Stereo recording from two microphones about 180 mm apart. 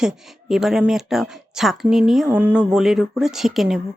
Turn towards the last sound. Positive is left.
turn(degrees=0)  # may be behind; listen again after turning